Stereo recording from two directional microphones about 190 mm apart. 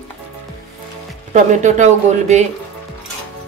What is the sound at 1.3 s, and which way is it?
Speech, 40° right (ahead or behind).